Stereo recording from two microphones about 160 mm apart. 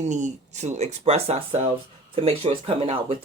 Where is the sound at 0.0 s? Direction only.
45° right (ahead or behind).